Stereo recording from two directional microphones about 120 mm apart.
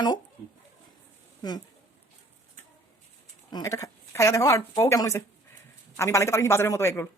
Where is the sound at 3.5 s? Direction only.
30° left (ahead or behind).